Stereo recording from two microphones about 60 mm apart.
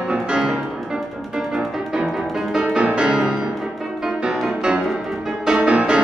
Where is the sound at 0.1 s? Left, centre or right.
Centre.